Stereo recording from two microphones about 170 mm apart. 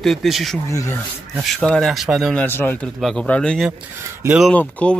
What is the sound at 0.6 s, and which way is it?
Speech, 15° left (ahead or behind).